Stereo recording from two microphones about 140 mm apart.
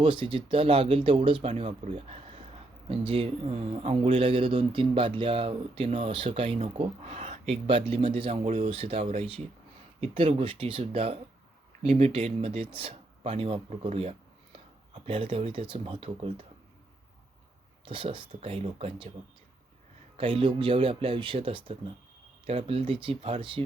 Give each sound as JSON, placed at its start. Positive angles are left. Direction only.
{"t": 0.0, "sound": "speech", "side_deg": -35}
{"t": 17.8, "sound": "speech", "side_deg": -35}
{"t": 20.1, "sound": "speech", "side_deg": -40}